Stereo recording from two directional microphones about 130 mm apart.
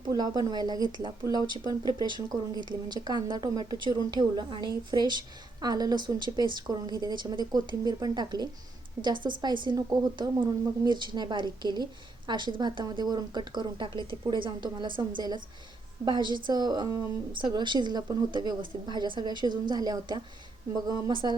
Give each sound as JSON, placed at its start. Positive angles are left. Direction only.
{"t": 0.0, "sound": "speech", "side_deg": -30}